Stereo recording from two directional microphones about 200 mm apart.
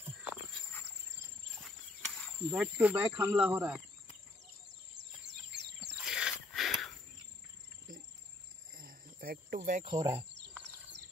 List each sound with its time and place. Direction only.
2.5 s speech: 5° right (ahead or behind)
4.6 s bird: 60° right (ahead or behind)
5.8 s wild animals: 5° right (ahead or behind)
6.5 s cricket: centre (ahead or behind)
8.7 s cricket: 45° right (ahead or behind)
9.8 s speech: 25° right (ahead or behind)